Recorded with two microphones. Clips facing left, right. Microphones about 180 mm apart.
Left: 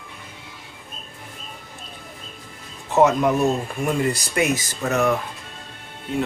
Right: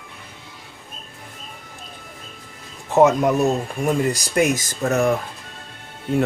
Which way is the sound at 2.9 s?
50° right (ahead or behind).